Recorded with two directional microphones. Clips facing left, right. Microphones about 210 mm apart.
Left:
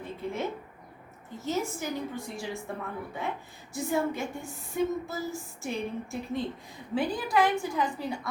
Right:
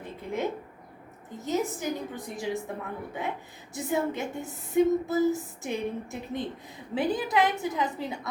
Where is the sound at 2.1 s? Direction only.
20° right (ahead or behind).